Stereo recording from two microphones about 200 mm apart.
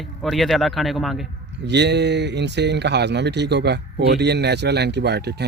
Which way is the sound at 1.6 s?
60° right (ahead or behind).